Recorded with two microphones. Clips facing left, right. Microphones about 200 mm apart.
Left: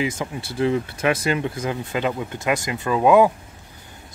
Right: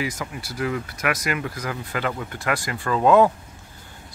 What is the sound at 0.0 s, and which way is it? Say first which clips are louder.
Speech: left 4 dB; 25° left (ahead or behind).